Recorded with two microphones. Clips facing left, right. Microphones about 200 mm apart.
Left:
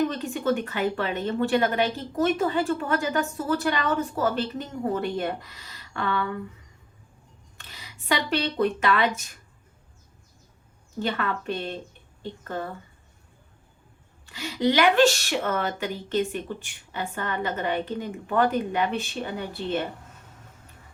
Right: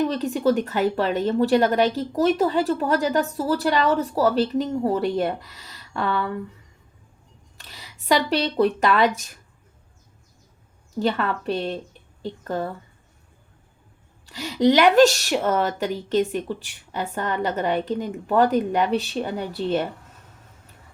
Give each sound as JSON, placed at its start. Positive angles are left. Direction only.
{"t": 0.1, "sound": "a woman's voice", "side_deg": -40}
{"t": 7.6, "sound": "speech", "side_deg": -40}
{"t": 11.0, "sound": "a woman's voice", "side_deg": -40}
{"t": 14.3, "sound": "a woman's voice", "side_deg": -40}